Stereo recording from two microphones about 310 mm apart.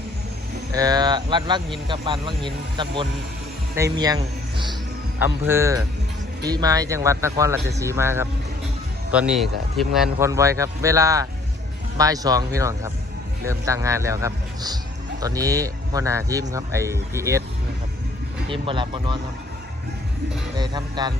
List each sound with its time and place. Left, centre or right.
0.7 s speech: centre
18.4 s speech: centre
20.6 s speech: centre